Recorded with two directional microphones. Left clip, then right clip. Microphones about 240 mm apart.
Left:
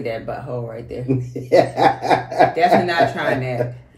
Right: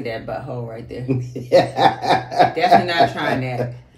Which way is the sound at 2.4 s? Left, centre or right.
Centre.